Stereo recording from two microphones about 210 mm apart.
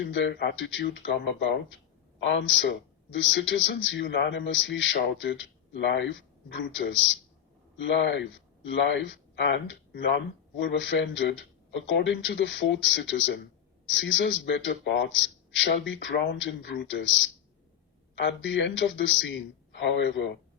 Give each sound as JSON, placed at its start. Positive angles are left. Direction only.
{"t": 0.1, "sound": "speech", "side_deg": 60}